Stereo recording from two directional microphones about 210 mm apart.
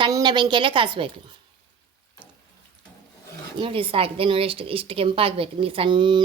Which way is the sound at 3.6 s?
25° right (ahead or behind).